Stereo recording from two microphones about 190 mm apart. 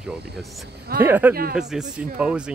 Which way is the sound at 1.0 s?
10° right (ahead or behind).